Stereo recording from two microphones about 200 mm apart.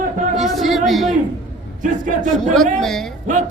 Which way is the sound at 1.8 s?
40° right (ahead or behind).